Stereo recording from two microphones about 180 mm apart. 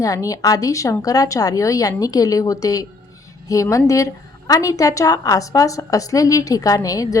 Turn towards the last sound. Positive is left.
turn(degrees=20)  # may be behind; listen again after turning